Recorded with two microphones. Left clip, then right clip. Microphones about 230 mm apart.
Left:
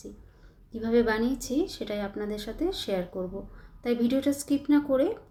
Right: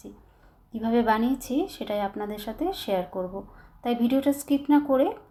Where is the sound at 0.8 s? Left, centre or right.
Right.